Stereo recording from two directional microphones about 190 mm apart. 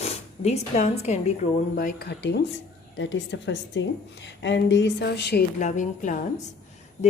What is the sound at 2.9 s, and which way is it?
A woman's voice, 75° left (ahead or behind).